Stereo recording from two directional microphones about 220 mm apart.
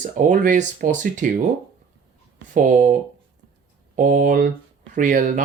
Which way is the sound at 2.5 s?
35° right (ahead or behind).